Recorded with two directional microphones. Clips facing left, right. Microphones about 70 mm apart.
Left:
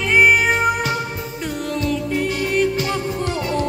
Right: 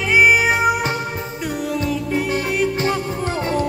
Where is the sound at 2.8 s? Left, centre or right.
Right.